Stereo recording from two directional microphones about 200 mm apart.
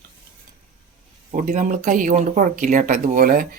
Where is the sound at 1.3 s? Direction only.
40° right (ahead or behind).